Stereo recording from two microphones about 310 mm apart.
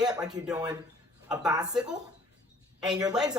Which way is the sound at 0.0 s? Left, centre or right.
Centre.